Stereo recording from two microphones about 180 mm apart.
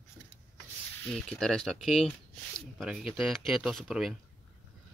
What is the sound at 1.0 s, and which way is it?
Speech, 5° left (ahead or behind).